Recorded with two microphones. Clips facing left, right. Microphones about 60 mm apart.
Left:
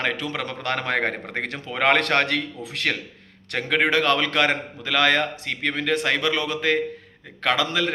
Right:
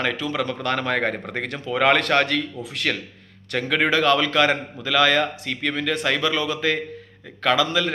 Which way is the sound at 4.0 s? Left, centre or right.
Left.